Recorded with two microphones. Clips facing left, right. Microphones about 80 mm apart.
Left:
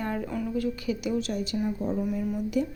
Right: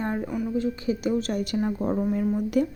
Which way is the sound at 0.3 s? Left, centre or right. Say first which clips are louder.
Right 2 dB; right.